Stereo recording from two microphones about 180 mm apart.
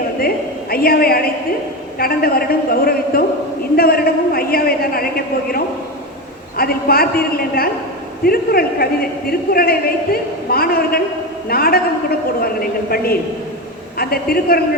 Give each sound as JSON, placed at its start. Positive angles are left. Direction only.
{"t": 0.2, "sound": "a woman's voice", "side_deg": 55}
{"t": 3.8, "sound": "a sound", "side_deg": 60}
{"t": 6.6, "sound": "a woman's voice", "side_deg": 55}